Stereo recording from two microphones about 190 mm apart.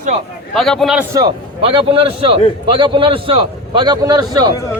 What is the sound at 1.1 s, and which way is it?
A man's voice, 20° right (ahead or behind).